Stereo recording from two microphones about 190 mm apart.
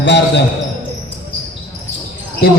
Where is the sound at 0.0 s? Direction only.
65° left (ahead or behind).